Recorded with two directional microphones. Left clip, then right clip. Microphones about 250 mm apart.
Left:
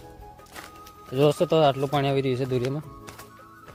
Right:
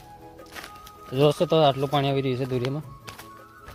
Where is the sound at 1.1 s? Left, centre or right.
Centre.